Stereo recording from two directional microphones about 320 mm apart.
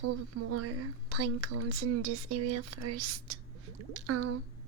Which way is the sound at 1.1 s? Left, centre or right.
Right.